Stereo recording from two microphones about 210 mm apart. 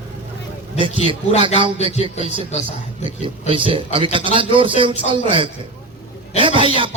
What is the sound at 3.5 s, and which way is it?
Speech, 25° right (ahead or behind).